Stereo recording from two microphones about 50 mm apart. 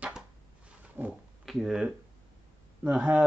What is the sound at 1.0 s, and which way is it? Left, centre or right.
Speech, right.